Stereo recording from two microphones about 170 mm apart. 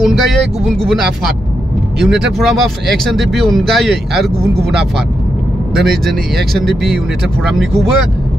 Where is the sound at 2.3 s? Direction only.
Centre (ahead or behind).